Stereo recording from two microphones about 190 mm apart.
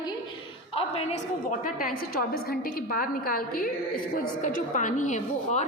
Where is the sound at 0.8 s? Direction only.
30° left (ahead or behind).